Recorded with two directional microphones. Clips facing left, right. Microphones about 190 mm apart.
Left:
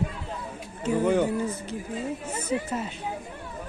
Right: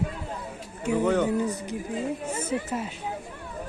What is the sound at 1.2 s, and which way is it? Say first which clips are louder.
A woman's voice: right 2 dB; 15° right (ahead or behind).